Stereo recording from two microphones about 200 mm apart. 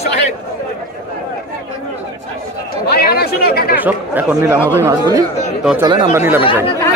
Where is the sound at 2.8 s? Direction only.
50° left (ahead or behind).